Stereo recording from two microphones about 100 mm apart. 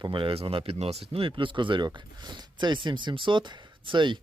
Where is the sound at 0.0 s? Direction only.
55° right (ahead or behind).